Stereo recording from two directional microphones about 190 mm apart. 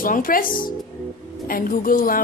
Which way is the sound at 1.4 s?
45° left (ahead or behind).